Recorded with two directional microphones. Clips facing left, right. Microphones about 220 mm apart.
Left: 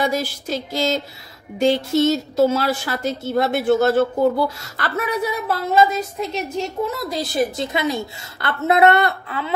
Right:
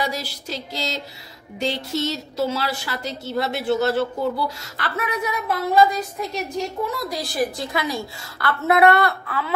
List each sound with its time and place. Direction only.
0.0 s a woman's voice: 50° left (ahead or behind)
5.7 s a woman's voice: 25° left (ahead or behind)